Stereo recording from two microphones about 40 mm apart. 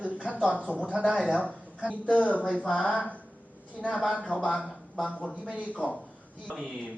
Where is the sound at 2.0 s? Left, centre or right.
Left.